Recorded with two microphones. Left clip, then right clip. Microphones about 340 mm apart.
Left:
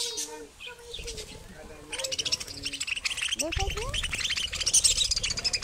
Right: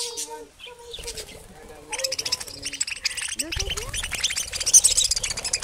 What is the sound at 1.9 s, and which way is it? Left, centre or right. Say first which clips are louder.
Bird: right 3 dB; centre.